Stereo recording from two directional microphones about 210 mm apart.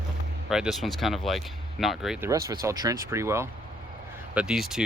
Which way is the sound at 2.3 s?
15° right (ahead or behind).